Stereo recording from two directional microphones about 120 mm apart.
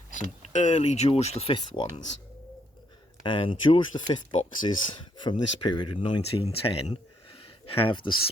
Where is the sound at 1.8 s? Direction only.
40° left (ahead or behind).